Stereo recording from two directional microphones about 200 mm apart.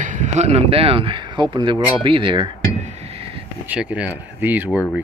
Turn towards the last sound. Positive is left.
turn(degrees=-10)  # may be behind; listen again after turning